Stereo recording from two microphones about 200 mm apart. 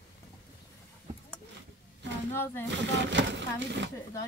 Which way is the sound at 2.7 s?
60° right (ahead or behind).